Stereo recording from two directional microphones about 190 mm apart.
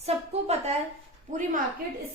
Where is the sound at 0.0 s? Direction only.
35° right (ahead or behind).